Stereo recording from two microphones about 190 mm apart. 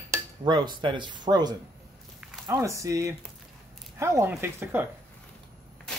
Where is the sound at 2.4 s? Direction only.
15° right (ahead or behind).